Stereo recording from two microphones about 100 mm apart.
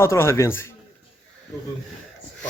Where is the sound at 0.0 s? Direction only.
25° left (ahead or behind).